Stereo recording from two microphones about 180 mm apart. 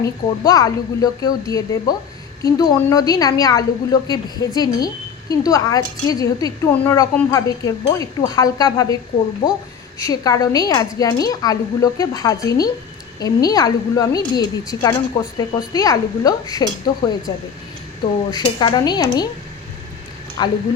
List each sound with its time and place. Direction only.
0.0 s speech: 20° left (ahead or behind)
10.1 s speech: 20° left (ahead or behind)
15.2 s speech: 25° left (ahead or behind)
20.4 s speech: 25° left (ahead or behind)